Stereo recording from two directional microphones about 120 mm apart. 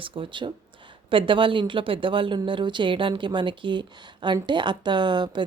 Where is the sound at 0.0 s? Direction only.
45° right (ahead or behind).